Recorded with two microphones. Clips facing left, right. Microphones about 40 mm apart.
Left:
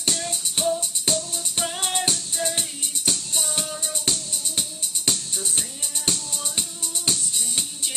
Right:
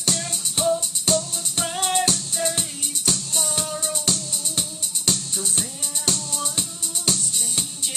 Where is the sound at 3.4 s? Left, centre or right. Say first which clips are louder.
Right 2 dB; centre.